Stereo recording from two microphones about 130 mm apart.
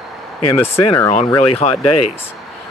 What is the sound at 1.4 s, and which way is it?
Speech, 55° left (ahead or behind).